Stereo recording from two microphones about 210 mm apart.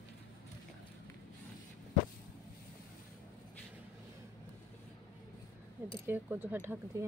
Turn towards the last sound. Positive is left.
turn(degrees=-10)  # may be behind; listen again after turning